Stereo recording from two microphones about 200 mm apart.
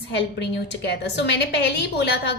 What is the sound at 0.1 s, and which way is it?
A woman's voice, 60° left (ahead or behind).